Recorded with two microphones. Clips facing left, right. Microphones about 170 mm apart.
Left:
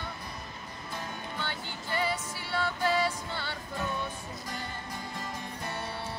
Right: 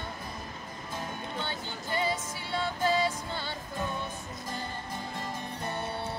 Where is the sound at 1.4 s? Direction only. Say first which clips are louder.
Right 1 dB; 20° right (ahead or behind).